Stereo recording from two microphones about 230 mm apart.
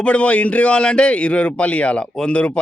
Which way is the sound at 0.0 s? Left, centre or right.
Centre.